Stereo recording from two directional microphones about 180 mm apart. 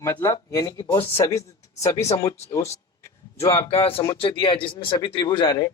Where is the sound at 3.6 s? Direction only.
30° left (ahead or behind).